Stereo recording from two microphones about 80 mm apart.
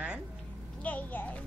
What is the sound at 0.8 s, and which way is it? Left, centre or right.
Speech, centre.